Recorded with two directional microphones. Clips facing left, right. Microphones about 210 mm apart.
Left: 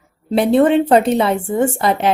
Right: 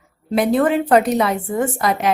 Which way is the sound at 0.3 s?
30° left (ahead or behind).